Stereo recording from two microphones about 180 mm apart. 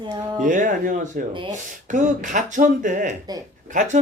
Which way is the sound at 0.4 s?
45° right (ahead or behind).